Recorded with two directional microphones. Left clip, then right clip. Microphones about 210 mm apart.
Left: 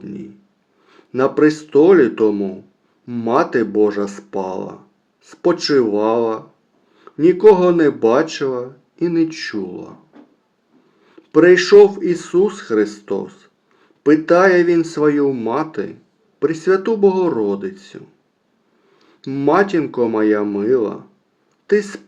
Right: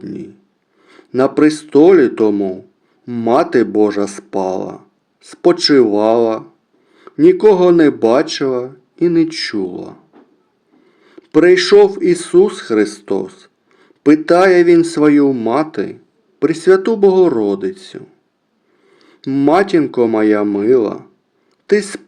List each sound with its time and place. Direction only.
0.0 s speech: 30° right (ahead or behind)
11.0 s speech: 30° right (ahead or behind)